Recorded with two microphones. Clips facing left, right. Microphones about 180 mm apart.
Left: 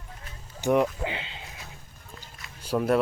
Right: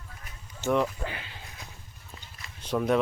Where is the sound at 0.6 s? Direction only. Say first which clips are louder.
Left 3 dB; 15° left (ahead or behind).